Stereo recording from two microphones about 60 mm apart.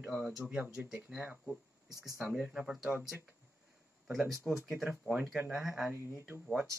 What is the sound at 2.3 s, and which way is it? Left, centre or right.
Speech, centre.